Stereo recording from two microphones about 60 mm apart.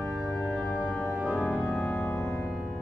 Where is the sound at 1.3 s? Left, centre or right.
Left.